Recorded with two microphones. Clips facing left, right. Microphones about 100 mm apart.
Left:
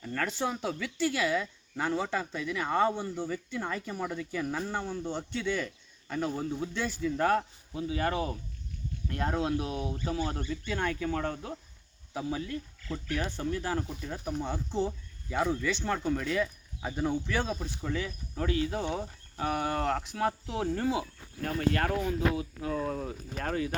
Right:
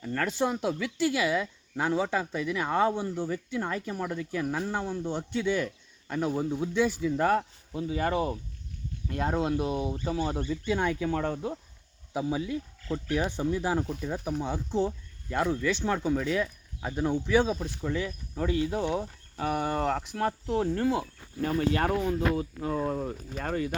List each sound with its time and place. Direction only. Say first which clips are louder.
0.0 s speech: right 4 dB; centre (ahead or behind)
7.8 s speech: right 2 dB; 5° left (ahead or behind); by 13.8 s 15° right (ahead or behind)
13.9 s speech: right 4 dB; 5° right (ahead or behind)
17.8 s speech: right 3 dB; 5° right (ahead or behind)
21.7 s speech: even; 10° right (ahead or behind)
22.0 s speech: right 2 dB; centre (ahead or behind)
22.7 s speech: right 3 dB; 10° right (ahead or behind)